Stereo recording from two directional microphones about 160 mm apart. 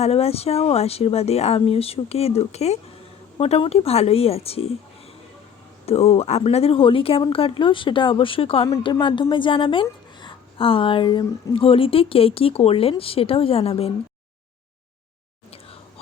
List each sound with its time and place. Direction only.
0.0 s a woman's voice: 40° left (ahead or behind)
5.8 s a woman's voice: 40° left (ahead or behind)